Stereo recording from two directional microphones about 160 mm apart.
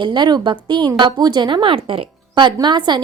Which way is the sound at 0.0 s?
30° right (ahead or behind).